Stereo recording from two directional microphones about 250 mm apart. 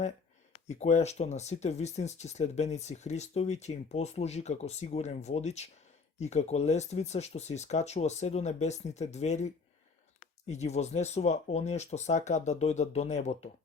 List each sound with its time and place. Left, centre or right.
0.5 s speech: left